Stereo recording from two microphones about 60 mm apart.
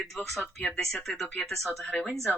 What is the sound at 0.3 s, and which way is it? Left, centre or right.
Speech, centre.